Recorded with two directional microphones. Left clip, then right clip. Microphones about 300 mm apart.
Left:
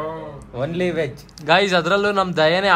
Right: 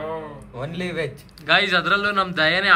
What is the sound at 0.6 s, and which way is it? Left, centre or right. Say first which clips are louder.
A man's voice: left 6 dB; left.